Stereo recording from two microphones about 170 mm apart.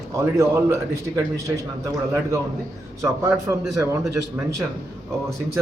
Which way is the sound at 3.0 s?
15° right (ahead or behind).